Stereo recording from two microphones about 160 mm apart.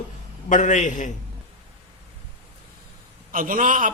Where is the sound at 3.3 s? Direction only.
60° right (ahead or behind).